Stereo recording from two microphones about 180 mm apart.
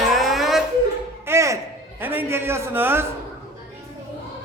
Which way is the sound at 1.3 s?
15° right (ahead or behind).